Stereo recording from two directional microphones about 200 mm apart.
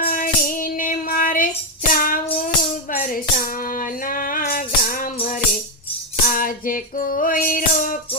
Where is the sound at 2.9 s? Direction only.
45° left (ahead or behind).